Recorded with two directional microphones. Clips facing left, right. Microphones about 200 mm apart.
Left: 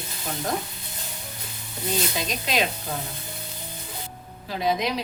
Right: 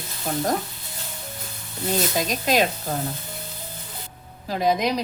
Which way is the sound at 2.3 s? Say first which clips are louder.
Right 5 dB; 45° right (ahead or behind).